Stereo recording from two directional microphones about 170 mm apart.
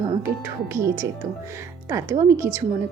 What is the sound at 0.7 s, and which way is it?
A woman's voice, 15° right (ahead or behind).